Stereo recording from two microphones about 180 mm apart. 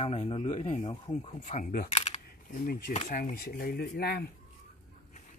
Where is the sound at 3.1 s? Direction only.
50° left (ahead or behind).